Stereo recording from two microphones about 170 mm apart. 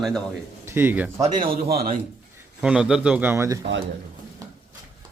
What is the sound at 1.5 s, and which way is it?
Speech, 60° right (ahead or behind).